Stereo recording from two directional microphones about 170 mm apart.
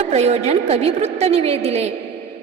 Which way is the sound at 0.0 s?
40° right (ahead or behind).